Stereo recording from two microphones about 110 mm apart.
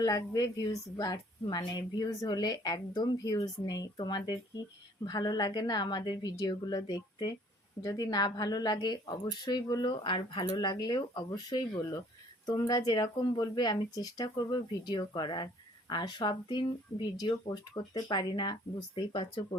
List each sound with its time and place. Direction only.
0.0 s a woman's voice: 35° left (ahead or behind); by 19.5 s 50° left (ahead or behind)